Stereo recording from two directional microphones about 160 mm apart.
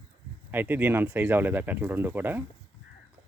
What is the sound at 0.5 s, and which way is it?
Speech, 10° right (ahead or behind).